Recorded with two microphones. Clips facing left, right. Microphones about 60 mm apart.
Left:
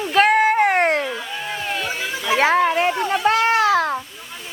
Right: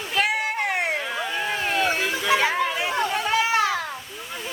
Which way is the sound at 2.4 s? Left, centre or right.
Left.